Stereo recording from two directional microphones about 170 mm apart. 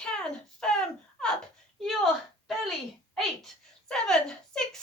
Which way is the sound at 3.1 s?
5° left (ahead or behind).